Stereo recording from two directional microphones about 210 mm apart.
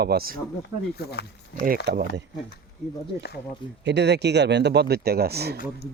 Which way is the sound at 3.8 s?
55° right (ahead or behind).